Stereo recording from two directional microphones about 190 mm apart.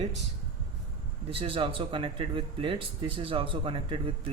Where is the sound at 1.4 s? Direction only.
30° right (ahead or behind).